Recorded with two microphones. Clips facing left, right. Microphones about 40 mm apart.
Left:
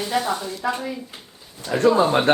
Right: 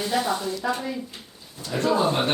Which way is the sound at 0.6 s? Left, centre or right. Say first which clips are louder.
Left 3 dB; centre.